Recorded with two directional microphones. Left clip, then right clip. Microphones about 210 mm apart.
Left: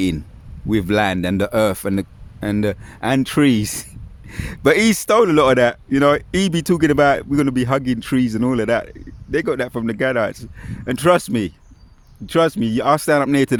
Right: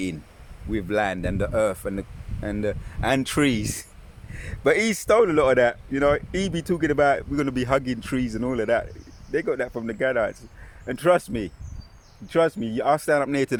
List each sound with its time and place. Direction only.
0.7 s speech: 45° left (ahead or behind)